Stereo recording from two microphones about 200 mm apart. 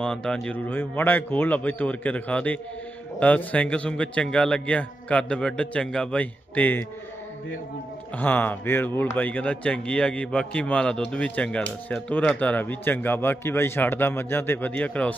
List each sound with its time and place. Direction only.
0.0 s a man's voice: 5° left (ahead or behind)
8.2 s a man's voice: 10° left (ahead or behind)